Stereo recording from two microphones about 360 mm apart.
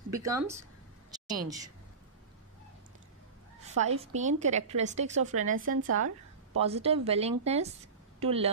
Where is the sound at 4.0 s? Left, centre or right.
Centre.